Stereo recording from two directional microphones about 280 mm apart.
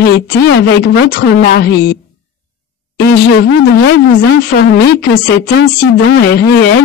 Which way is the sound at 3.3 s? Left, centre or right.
Left.